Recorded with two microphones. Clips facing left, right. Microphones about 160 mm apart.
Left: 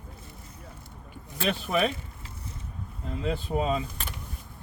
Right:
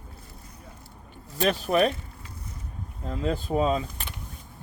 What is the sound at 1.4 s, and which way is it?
Speech, 40° right (ahead or behind).